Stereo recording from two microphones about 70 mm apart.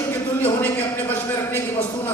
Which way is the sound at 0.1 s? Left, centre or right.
Left.